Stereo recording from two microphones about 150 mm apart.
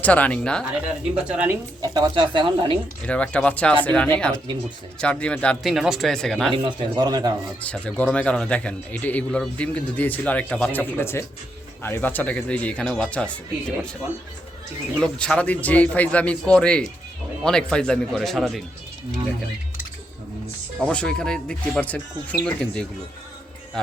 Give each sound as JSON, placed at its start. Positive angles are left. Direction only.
{"t": 0.0, "sound": "a man's voice", "side_deg": 10}
{"t": 1.1, "sound": "speech", "side_deg": -10}
{"t": 1.8, "sound": "speech", "side_deg": -25}
{"t": 3.1, "sound": "a man's voice", "side_deg": 10}
{"t": 6.5, "sound": "speech", "side_deg": -35}
{"t": 7.6, "sound": "a man's voice", "side_deg": 10}
{"t": 14.9, "sound": "a man's voice", "side_deg": 5}
{"t": 20.8, "sound": "a man's voice", "side_deg": 5}